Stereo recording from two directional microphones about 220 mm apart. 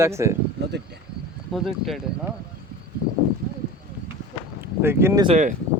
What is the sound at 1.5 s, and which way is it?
Speech, centre (ahead or behind).